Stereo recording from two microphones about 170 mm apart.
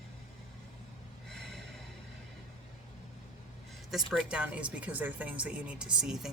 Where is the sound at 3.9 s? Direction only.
Centre (ahead or behind).